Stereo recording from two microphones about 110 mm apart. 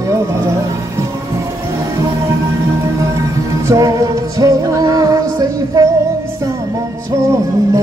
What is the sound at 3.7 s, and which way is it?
Music, 30° right (ahead or behind).